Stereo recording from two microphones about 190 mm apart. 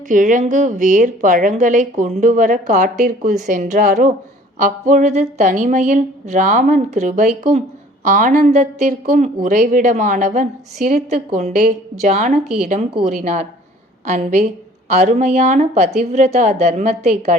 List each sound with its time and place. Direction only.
0.1 s a woman's voice: 45° right (ahead or behind)